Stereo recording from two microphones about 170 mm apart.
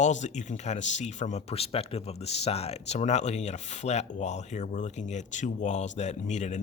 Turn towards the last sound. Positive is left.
turn(degrees=45)  # may be behind; listen again after turning